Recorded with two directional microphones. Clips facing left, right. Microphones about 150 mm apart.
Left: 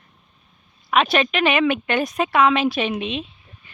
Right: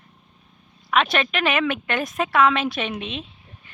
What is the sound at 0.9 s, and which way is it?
A woman's voice, 5° left (ahead or behind).